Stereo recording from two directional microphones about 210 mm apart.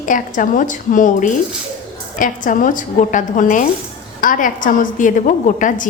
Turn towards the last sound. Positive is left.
turn(degrees=40)  # may be behind; listen again after turning